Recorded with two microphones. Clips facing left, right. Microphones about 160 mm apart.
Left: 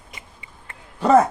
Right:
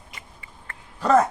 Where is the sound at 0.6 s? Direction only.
25° left (ahead or behind).